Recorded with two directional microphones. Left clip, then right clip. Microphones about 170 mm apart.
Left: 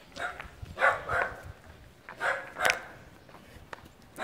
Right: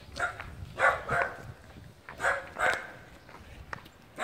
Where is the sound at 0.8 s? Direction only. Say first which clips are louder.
Even; 55° right (ahead or behind).